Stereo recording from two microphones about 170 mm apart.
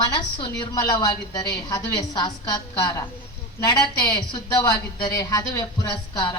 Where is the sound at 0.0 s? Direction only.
25° left (ahead or behind).